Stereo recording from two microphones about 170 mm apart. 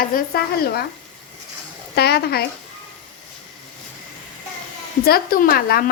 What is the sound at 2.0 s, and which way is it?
Speech, 70° left (ahead or behind).